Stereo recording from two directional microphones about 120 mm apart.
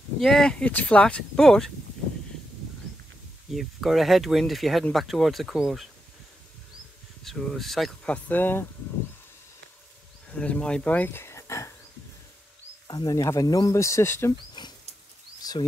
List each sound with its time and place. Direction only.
0.2 s speech: 5° left (ahead or behind)
3.4 s speech: centre (ahead or behind)
7.2 s speech: centre (ahead or behind); by 8.6 s 15° left (ahead or behind)
10.3 s speech: 10° left (ahead or behind)
12.8 s speech: 30° left (ahead or behind)
15.4 s a sound: 35° left (ahead or behind)